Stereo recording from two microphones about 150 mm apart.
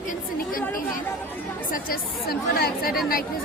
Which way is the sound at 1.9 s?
90° left.